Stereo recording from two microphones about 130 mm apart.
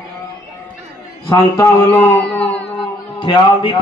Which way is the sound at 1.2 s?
25° left (ahead or behind).